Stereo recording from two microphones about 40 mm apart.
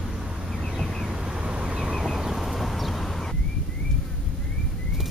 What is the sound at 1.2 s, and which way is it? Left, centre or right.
Vehicle, right.